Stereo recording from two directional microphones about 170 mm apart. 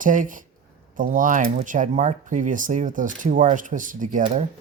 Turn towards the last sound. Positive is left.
turn(degrees=-50)  # may be behind; listen again after turning